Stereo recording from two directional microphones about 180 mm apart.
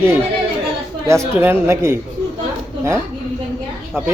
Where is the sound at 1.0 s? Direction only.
15° right (ahead or behind).